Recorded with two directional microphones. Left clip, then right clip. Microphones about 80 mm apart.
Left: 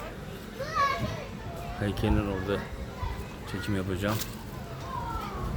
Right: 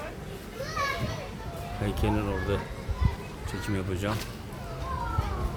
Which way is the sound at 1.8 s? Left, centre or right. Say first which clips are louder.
Even; centre.